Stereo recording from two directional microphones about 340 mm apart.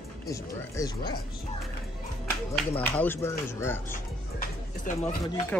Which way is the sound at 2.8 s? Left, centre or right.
Centre.